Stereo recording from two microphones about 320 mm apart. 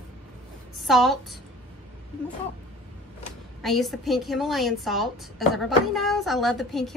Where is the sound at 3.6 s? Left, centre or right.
Centre.